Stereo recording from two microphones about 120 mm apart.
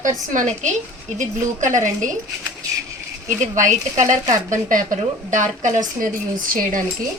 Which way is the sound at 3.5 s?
90° right.